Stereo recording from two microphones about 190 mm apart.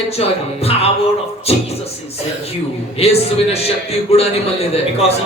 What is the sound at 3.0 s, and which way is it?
Speech, 30° left (ahead or behind).